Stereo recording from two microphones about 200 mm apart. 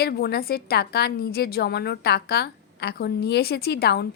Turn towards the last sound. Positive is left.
turn(degrees=50)  # may be behind; listen again after turning